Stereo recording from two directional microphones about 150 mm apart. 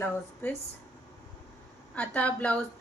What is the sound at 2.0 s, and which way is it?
Speech, 10° left (ahead or behind).